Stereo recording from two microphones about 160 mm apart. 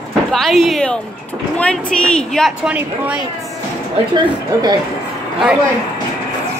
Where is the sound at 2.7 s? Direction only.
10° right (ahead or behind).